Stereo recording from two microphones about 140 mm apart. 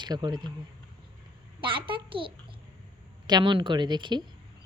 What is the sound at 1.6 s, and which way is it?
Speech, 35° right (ahead or behind).